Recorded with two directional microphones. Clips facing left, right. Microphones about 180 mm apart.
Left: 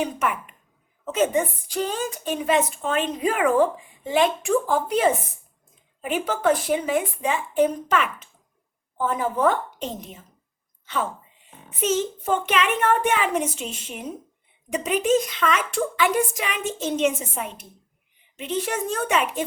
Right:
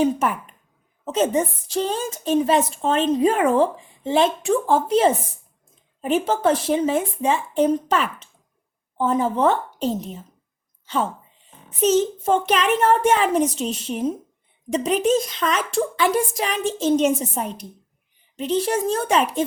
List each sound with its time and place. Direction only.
0.0 s a woman's voice: 35° right (ahead or behind)
10.8 s a woman's voice: 35° right (ahead or behind)